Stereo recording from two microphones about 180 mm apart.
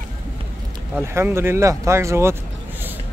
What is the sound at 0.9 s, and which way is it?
Speech, 15° right (ahead or behind).